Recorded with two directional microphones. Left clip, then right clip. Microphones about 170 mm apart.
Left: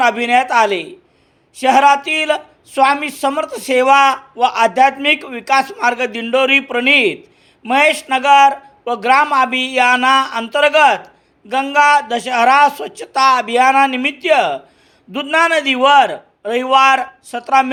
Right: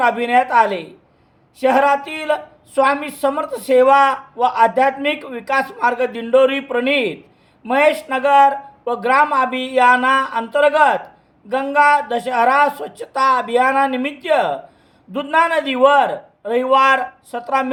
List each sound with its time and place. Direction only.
0.0 s speech: 20° left (ahead or behind)